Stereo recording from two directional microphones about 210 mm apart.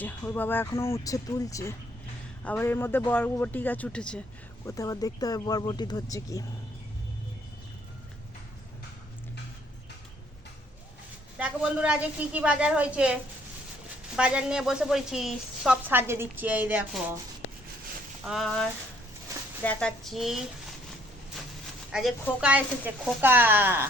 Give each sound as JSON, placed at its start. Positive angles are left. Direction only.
{"t": 0.0, "sound": "a man's voice", "side_deg": 10}
{"t": 4.6, "sound": "a man's voice", "side_deg": 15}
{"t": 11.3, "sound": "a woman's voice", "side_deg": -5}
{"t": 14.2, "sound": "a woman's voice", "side_deg": -5}
{"t": 18.3, "sound": "a woman's voice", "side_deg": 0}
{"t": 21.9, "sound": "a woman's voice", "side_deg": -5}